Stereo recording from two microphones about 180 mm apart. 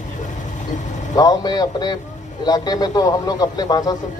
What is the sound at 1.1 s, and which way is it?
A man's voice, 20° left (ahead or behind).